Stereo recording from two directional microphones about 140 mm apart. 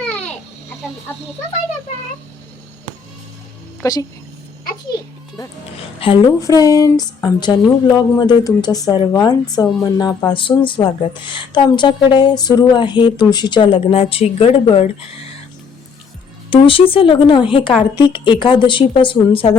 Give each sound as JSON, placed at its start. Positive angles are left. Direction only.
{"t": 3.8, "sound": "speech", "side_deg": 25}
{"t": 6.0, "sound": "speech", "side_deg": 40}
{"t": 6.4, "sound": "speech", "side_deg": 25}
{"t": 16.5, "sound": "speech", "side_deg": 40}